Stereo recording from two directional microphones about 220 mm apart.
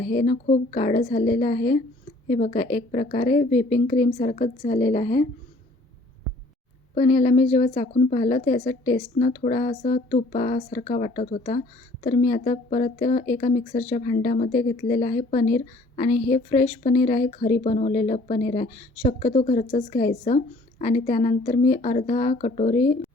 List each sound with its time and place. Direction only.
0.1 s speech: 30° left (ahead or behind)
6.9 s speech: 30° left (ahead or behind)